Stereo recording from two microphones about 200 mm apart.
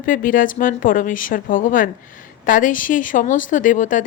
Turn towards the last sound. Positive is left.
turn(degrees=40)  # may be behind; listen again after turning